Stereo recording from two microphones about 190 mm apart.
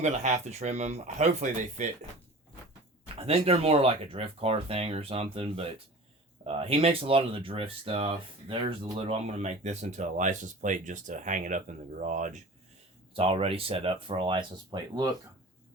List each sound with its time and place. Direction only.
0.0 s speech: 35° right (ahead or behind)
3.2 s speech: 30° right (ahead or behind)
13.1 s speech: 30° right (ahead or behind)